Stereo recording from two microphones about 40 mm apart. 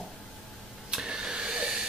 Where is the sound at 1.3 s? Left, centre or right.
Right.